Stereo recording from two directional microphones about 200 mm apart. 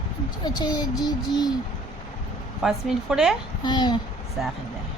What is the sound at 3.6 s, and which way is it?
Speech, 20° left (ahead or behind).